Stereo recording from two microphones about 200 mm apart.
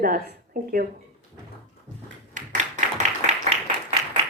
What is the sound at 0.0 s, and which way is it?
Speech, 45° right (ahead or behind).